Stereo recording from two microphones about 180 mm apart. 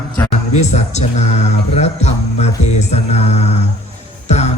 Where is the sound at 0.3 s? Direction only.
40° left (ahead or behind).